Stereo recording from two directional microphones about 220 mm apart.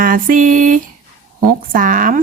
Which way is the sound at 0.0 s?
40° right (ahead or behind).